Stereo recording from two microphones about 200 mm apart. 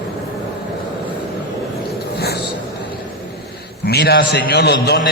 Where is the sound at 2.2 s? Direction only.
55° left (ahead or behind).